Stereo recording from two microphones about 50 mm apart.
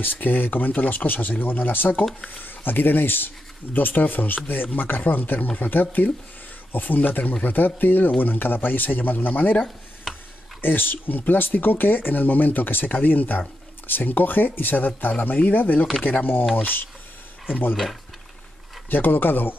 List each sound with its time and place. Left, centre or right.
0.0 s speech: left
10.1 s tick-tock: centre
10.6 s speech: left
18.9 s speech: left